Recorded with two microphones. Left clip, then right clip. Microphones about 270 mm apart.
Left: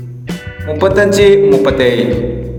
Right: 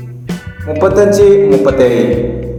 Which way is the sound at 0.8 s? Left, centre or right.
Left.